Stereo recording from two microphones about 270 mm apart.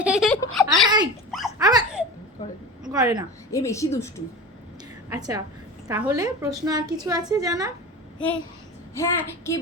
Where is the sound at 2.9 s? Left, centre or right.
Centre.